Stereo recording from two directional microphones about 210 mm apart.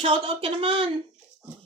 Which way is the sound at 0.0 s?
25° right (ahead or behind).